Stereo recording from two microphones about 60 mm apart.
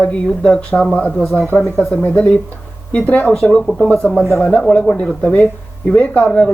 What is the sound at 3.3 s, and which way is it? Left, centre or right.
Speech, centre.